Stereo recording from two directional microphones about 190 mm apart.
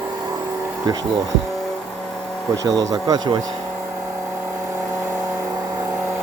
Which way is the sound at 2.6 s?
20° right (ahead or behind).